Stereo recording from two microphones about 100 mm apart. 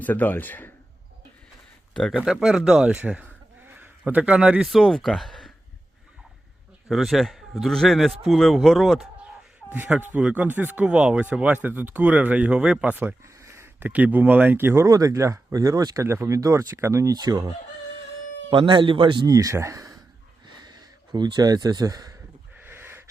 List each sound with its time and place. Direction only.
0.0 s speech: 20° left (ahead or behind)
1.9 s speech: 5° left (ahead or behind)
2.1 s a man's voice: 5° right (ahead or behind)
6.8 s speech: centre (ahead or behind)
9.7 s speech: 15° right (ahead or behind)
13.2 s speech: 30° right (ahead or behind)
14.8 s speech: 35° right (ahead or behind)
18.5 s a man's voice: 55° right (ahead or behind)
19.3 s speech: 35° right (ahead or behind)
20.5 s speech: 45° right (ahead or behind)
22.5 s a sound: 20° right (ahead or behind)